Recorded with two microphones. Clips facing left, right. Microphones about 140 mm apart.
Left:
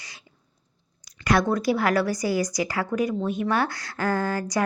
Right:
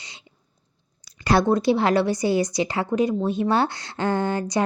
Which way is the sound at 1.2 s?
30° right (ahead or behind).